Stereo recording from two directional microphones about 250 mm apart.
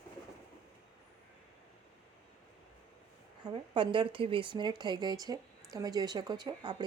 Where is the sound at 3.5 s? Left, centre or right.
Centre.